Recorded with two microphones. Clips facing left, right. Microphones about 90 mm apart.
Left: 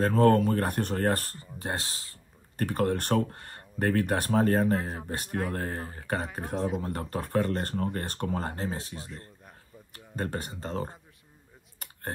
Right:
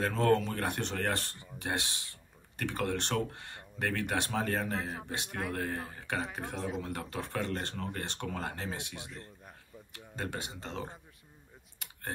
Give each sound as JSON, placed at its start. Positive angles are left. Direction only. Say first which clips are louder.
{"t": 0.0, "sound": "speech", "louder": "left 6 dB", "side_deg": 50}